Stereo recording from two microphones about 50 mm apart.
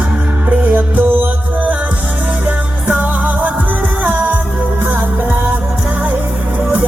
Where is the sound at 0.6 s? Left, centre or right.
Right.